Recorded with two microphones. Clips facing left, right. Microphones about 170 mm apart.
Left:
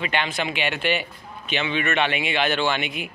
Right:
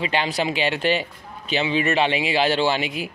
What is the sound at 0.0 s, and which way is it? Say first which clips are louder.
A man's voice: right 3 dB; 35° right (ahead or behind).